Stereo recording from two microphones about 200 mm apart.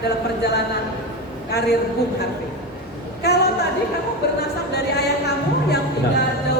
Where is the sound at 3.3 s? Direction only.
55° left (ahead or behind).